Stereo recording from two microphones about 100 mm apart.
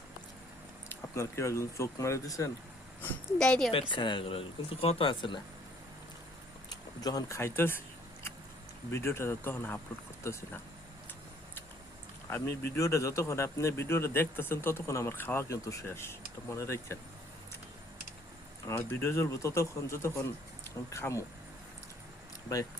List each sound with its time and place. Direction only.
0.9 s speech: 25° left (ahead or behind)
3.3 s a woman's voice: 5° left (ahead or behind)
3.7 s speech: 60° left (ahead or behind)
6.7 s speech: 40° left (ahead or behind); by 7.8 s 20° left (ahead or behind)
8.9 s speech: 25° left (ahead or behind)
12.3 s speech: 30° left (ahead or behind)
18.7 s speech: 20° left (ahead or behind)